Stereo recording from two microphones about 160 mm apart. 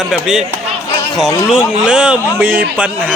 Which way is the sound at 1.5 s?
5° right (ahead or behind).